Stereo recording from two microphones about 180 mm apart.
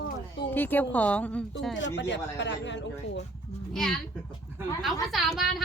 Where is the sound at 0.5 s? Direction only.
10° left (ahead or behind).